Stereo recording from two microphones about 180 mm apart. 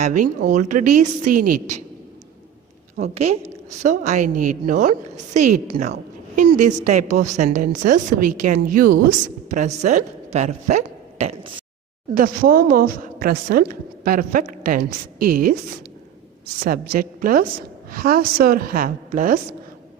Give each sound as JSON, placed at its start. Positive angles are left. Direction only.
{"t": 0.0, "sound": "a woman's voice", "side_deg": -45}
{"t": 3.0, "sound": "a woman's voice", "side_deg": -35}
{"t": 12.1, "sound": "a woman's voice", "side_deg": -50}
{"t": 16.6, "sound": "a woman's voice", "side_deg": -55}